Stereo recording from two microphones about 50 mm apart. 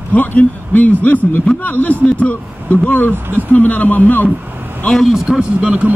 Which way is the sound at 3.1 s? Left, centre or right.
Right.